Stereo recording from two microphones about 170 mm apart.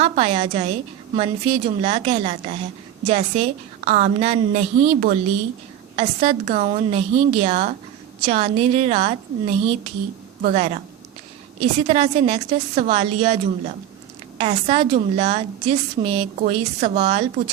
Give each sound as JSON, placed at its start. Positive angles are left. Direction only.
{"t": 0.0, "sound": "a woman's voice", "side_deg": -35}